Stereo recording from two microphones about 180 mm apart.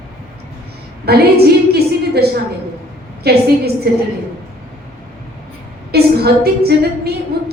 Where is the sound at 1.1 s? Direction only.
60° right (ahead or behind).